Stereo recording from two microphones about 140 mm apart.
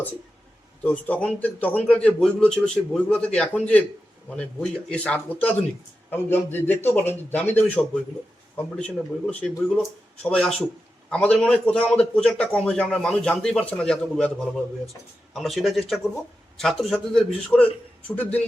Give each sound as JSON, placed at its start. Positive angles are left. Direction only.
{"t": 0.9, "sound": "a man's voice", "side_deg": 10}
{"t": 15.3, "sound": "a man's voice", "side_deg": 0}